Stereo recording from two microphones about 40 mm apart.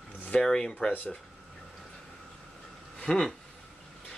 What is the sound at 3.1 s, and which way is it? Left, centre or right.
Speech, left.